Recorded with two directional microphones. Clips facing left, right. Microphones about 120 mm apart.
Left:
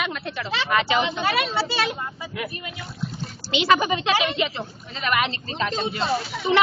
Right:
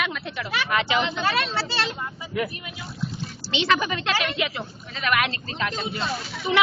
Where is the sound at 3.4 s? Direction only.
5° left (ahead or behind).